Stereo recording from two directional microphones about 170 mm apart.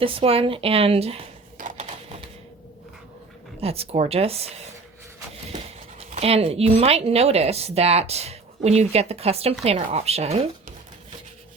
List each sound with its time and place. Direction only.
0.0 s speech: 30° right (ahead or behind)
1.5 s typewriter: 50° right (ahead or behind)
3.6 s speech: 35° right (ahead or behind)
6.0 s speech: 40° right (ahead or behind)